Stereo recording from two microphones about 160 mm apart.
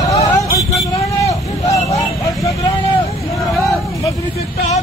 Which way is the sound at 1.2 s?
20° left (ahead or behind).